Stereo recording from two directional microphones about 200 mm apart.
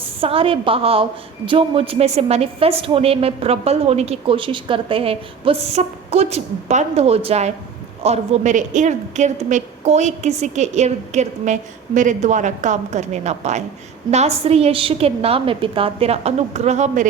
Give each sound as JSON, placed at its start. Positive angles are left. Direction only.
{"t": 0.2, "sound": "a woman's voice", "side_deg": -30}